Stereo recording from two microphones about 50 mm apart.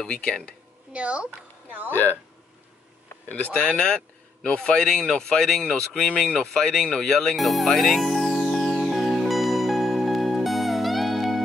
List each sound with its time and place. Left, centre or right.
0.0 s speech: centre
0.9 s speech: right
3.3 s speech: left; by 7.3 s centre
7.3 s music: centre